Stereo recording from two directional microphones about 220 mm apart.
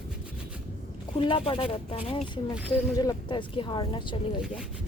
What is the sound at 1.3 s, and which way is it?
Speech, 25° left (ahead or behind).